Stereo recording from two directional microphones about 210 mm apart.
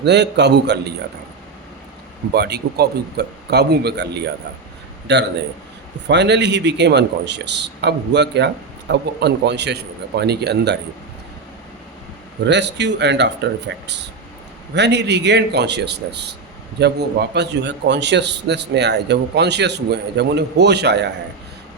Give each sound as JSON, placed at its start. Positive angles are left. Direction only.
{"t": 0.0, "sound": "a man's voice", "side_deg": -55}
{"t": 2.3, "sound": "a man's voice", "side_deg": -50}
{"t": 12.5, "sound": "a man's voice", "side_deg": -55}